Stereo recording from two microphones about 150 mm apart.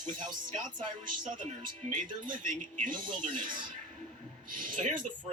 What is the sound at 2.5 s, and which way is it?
Speech, 60° right (ahead or behind).